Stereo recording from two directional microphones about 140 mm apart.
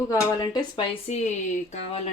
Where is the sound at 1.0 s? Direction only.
55° left (ahead or behind).